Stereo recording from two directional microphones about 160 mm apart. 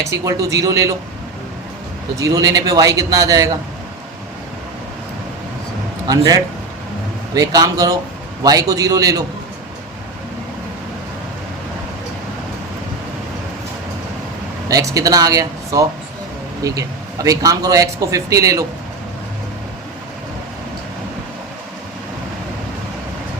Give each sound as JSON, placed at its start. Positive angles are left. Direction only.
{"t": 0.3, "sound": "a man's voice", "side_deg": -20}
{"t": 2.1, "sound": "a man's voice", "side_deg": -20}
{"t": 6.1, "sound": "a man's voice", "side_deg": -25}
{"t": 14.7, "sound": "a man's voice", "side_deg": -20}